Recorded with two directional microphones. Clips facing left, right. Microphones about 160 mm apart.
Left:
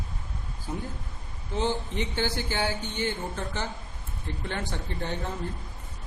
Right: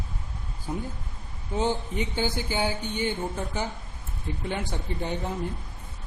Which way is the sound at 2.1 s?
15° right (ahead or behind).